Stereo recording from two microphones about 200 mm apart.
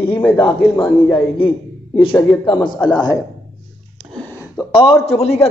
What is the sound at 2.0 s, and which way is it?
A man's voice, 25° left (ahead or behind).